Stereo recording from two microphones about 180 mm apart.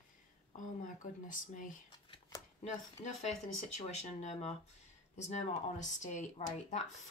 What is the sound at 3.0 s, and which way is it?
Speech, 40° left (ahead or behind).